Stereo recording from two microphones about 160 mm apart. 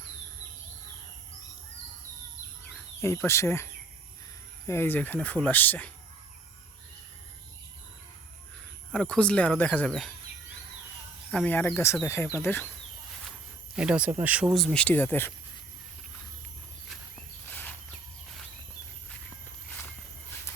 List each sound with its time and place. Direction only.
3.2 s speech: 15° left (ahead or behind)
8.9 s speech: 5° left (ahead or behind)
11.3 s speech: 10° left (ahead or behind)
13.7 s speech: 5° right (ahead or behind); by 15.3 s 15° left (ahead or behind)
17.5 s a sound: 10° left (ahead or behind)